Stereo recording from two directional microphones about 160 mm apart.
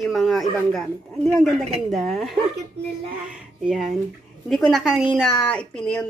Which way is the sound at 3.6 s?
Centre (ahead or behind).